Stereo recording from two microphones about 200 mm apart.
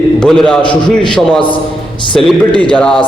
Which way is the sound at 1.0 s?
25° left (ahead or behind).